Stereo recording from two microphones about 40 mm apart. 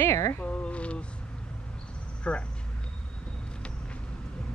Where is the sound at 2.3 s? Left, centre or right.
Left.